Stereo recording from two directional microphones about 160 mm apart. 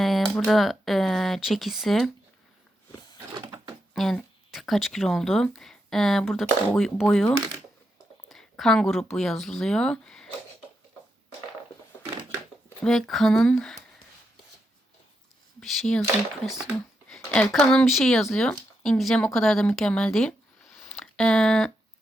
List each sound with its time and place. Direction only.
0.0 s speech: centre (ahead or behind)
3.3 s a sound: 20° right (ahead or behind)
3.9 s speech: centre (ahead or behind)
12.8 s speech: centre (ahead or behind)
15.6 s speech: centre (ahead or behind)
20.7 s a sound: centre (ahead or behind)